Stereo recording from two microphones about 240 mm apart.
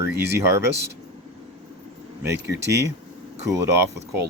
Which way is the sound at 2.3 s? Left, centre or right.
Right.